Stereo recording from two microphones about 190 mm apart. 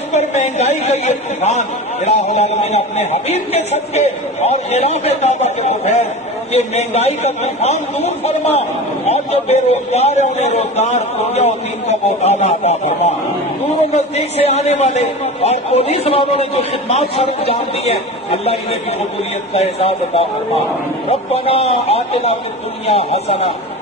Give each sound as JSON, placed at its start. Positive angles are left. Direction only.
{"t": 0.1, "sound": "speech", "side_deg": 35}
{"t": 18.4, "sound": "speech", "side_deg": 30}